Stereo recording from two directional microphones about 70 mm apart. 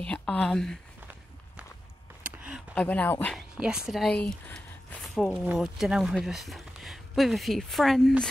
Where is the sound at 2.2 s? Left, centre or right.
Right.